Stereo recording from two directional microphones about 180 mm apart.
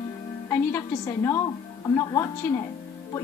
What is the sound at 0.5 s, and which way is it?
A woman's voice, 15° left (ahead or behind).